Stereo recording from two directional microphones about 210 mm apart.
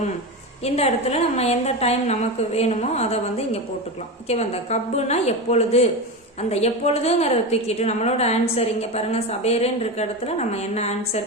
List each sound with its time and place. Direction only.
0.6 s a woman's voice: 30° left (ahead or behind)